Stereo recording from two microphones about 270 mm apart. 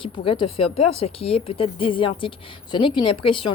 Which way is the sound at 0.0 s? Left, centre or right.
Centre.